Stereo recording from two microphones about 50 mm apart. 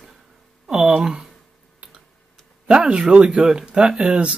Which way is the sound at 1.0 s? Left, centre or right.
Centre.